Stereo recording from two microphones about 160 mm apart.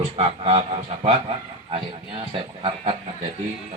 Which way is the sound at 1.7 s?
35° right (ahead or behind).